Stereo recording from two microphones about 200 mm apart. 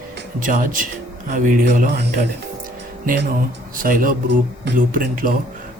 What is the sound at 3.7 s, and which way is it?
A man's voice, 45° right (ahead or behind).